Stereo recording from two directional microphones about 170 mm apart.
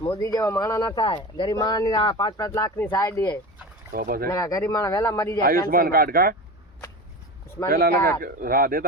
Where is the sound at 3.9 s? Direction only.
60° right (ahead or behind).